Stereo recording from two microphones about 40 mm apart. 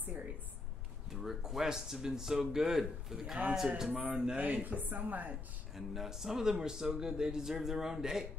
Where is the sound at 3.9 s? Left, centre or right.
Right.